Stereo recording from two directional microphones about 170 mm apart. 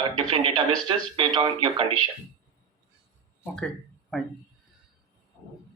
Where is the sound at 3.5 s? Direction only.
Centre (ahead or behind).